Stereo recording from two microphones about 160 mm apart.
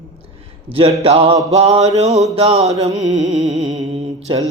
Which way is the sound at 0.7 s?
35° right (ahead or behind).